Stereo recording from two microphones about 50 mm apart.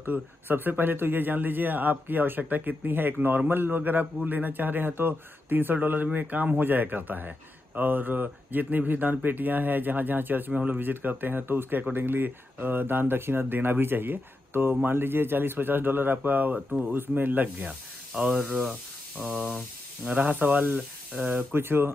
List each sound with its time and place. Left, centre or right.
0.0 s a man's voice: right
10.5 s speech: right
10.8 s a man's voice: right
18.1 s speech: right
19.1 s a man's voice: right
21.5 s speech: right